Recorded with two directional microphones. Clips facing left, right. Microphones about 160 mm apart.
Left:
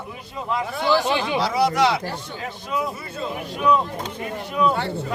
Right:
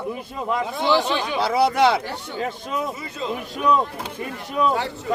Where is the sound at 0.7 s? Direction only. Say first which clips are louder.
Even; 20° right (ahead or behind).